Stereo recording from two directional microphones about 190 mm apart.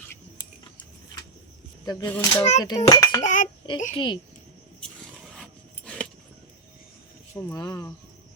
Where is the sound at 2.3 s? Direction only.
35° left (ahead or behind).